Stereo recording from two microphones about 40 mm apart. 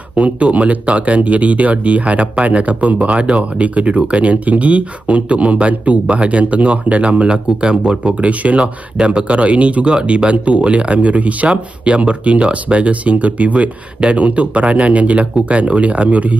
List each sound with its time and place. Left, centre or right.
0.1 s speech: right
8.2 s speech: right
8.5 s speech: right